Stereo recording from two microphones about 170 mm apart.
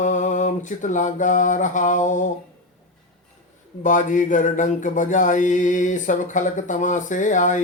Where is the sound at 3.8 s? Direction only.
50° left (ahead or behind).